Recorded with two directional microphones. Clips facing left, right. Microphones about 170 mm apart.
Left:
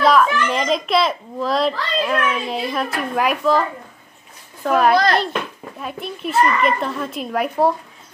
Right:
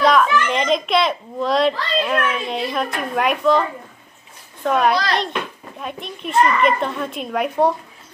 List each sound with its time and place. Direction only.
0.0 s a child's voice: centre (ahead or behind)
4.6 s a child's voice: 5° left (ahead or behind)